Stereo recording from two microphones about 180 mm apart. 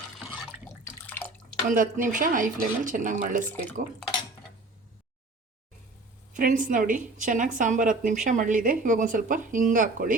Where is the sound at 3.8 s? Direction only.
60° right (ahead or behind).